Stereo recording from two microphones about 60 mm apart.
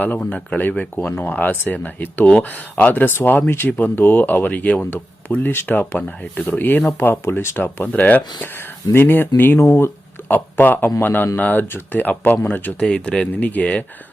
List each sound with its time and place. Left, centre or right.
0.2 s speech: left
8.5 s speech: left
9.6 s speech: left
10.2 s speech: left
12.8 s speech: centre
13.3 s speech: left